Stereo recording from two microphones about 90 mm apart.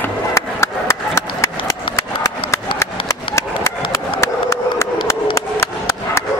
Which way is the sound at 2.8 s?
30° left (ahead or behind).